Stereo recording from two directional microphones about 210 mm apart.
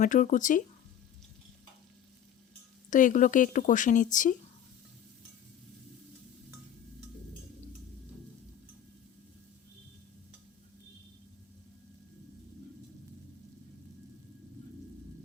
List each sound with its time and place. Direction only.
0.0 s a woman's voice: 35° left (ahead or behind)
2.9 s a woman's voice: 40° left (ahead or behind)